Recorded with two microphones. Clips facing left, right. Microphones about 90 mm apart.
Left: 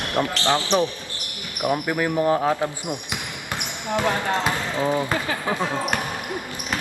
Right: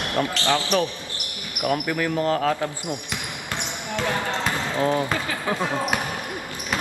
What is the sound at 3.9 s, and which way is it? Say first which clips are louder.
Speech: left 3 dB; 20° left (ahead or behind).